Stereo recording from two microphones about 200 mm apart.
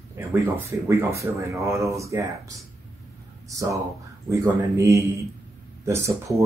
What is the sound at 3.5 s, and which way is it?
Speech, 15° right (ahead or behind).